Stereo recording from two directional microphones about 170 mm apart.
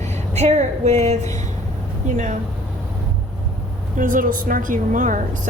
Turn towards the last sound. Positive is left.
turn(degrees=-50)  # may be behind; listen again after turning